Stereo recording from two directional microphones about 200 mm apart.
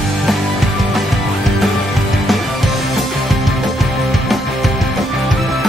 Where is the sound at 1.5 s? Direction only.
Centre (ahead or behind).